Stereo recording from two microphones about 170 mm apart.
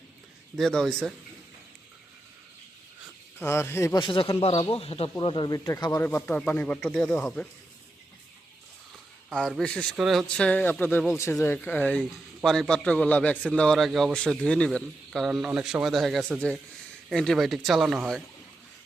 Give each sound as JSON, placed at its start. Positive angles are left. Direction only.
{"t": 0.5, "sound": "a man's voice", "side_deg": 0}
{"t": 3.3, "sound": "speech", "side_deg": 15}
{"t": 4.0, "sound": "speech", "side_deg": 30}
{"t": 9.3, "sound": "a man's voice", "side_deg": 5}